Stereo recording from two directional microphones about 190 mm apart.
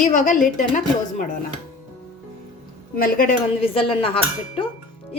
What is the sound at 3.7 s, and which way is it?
Dishes, 30° left (ahead or behind).